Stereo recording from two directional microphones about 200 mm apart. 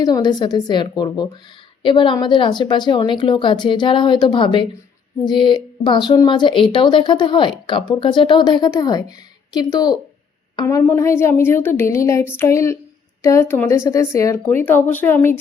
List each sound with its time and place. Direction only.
0.0 s a woman's voice: 20° left (ahead or behind)